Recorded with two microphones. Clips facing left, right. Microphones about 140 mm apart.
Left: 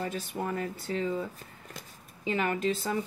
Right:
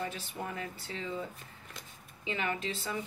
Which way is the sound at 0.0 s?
45° left (ahead or behind).